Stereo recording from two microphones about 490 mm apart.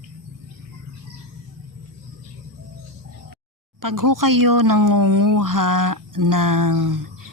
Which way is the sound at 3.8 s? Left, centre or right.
Right.